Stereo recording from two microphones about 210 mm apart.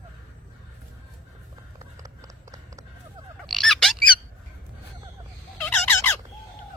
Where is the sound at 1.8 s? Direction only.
15° right (ahead or behind).